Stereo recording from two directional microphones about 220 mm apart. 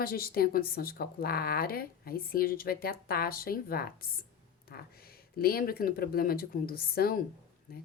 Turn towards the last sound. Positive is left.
turn(degrees=45)  # may be behind; listen again after turning